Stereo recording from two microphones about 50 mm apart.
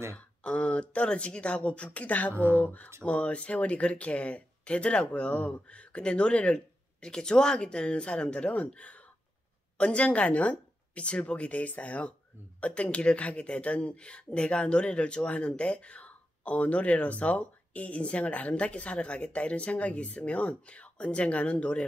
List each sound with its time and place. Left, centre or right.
0.4 s speech: left
2.3 s speech: right
2.6 s speech: left